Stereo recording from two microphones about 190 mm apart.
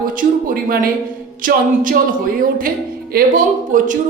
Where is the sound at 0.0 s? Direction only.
45° right (ahead or behind).